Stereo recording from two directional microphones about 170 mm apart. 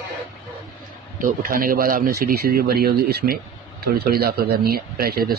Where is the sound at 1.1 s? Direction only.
55° right (ahead or behind).